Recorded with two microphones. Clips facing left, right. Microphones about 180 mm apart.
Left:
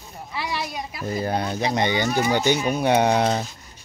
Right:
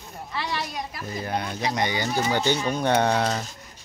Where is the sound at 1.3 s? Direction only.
30° left (ahead or behind).